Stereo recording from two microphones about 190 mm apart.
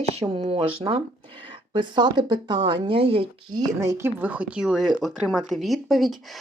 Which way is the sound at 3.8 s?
15° right (ahead or behind).